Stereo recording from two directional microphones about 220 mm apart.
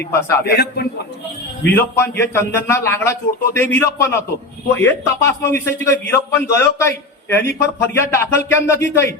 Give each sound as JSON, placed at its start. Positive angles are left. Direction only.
{"t": 0.0, "sound": "a man's voice", "side_deg": 10}
{"t": 0.4, "sound": "a man's voice", "side_deg": 45}
{"t": 1.6, "sound": "a man's voice", "side_deg": 10}